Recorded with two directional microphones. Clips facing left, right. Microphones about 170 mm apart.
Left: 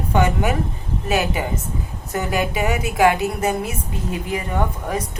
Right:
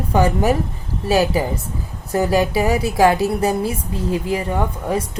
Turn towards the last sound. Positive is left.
turn(degrees=-30)  # may be behind; listen again after turning